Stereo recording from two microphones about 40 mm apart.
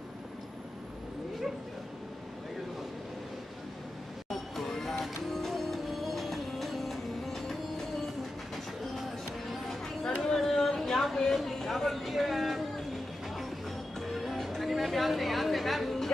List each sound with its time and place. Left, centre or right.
4.3 s music: centre
10.0 s a sound: centre
13.9 s music: centre